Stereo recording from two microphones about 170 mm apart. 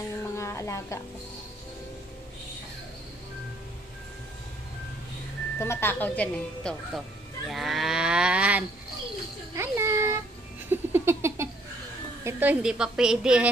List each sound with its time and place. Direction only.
0.2 s music: 15° left (ahead or behind)
5.6 s speech: 15° left (ahead or behind)
7.4 s cattle: centre (ahead or behind)
9.6 s a sound: 15° right (ahead or behind)
10.7 s giggle: 15° right (ahead or behind)
12.3 s a woman's voice: 10° right (ahead or behind)